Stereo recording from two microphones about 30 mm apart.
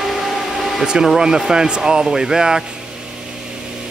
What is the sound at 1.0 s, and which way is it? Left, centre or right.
Speech, centre.